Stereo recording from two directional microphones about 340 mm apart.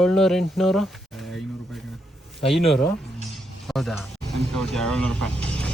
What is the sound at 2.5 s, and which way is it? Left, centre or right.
Speech, centre.